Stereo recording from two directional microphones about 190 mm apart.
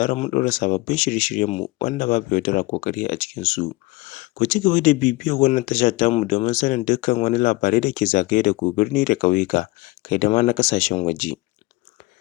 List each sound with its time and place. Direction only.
0.0 s speech: 40° left (ahead or behind)